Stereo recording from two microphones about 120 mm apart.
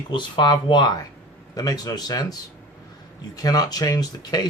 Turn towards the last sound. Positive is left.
turn(degrees=35)  # may be behind; listen again after turning